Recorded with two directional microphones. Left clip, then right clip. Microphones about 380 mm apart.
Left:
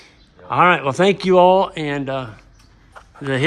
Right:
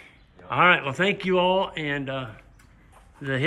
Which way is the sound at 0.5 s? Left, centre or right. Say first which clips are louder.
Left 5 dB; centre.